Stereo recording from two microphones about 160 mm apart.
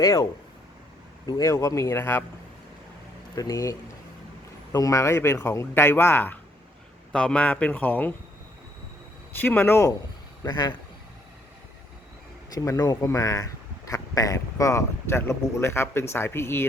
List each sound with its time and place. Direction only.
0.0 s speech: 20° left (ahead or behind)
1.3 s speech: 20° left (ahead or behind)
3.3 s speech: 20° left (ahead or behind)
9.4 s speech: 10° left (ahead or behind)
10.4 s speech: 25° left (ahead or behind)
12.5 s speech: 20° left (ahead or behind)